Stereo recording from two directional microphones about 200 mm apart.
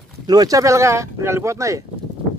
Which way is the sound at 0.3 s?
20° right (ahead or behind).